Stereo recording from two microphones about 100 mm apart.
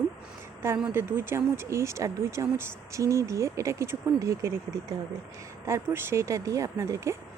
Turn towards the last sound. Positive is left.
turn(degrees=-30)  # may be behind; listen again after turning